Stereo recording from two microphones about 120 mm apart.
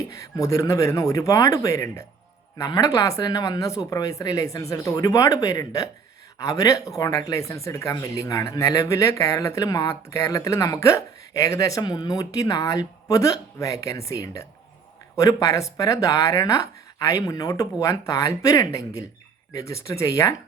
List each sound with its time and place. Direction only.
0.1 s speech: 25° left (ahead or behind)